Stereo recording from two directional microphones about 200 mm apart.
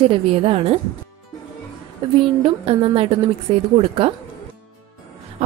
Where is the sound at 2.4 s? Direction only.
30° right (ahead or behind).